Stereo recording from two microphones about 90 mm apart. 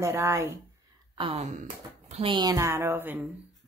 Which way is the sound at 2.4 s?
35° right (ahead or behind).